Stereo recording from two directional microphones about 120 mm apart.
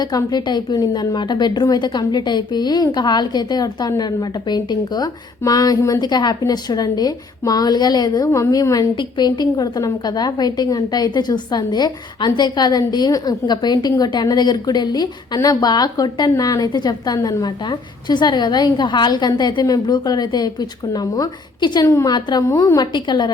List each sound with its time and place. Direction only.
0.0 s a woman's voice: 35° left (ahead or behind)